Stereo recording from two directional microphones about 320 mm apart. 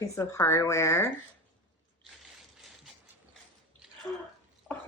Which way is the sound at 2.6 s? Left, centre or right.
Centre.